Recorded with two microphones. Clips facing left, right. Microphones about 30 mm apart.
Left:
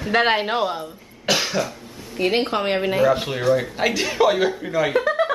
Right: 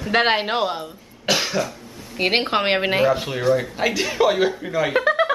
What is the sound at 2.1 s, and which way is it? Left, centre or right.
Speech, right.